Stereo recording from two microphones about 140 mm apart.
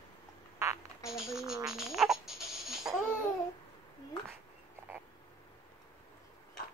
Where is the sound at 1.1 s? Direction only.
5° right (ahead or behind).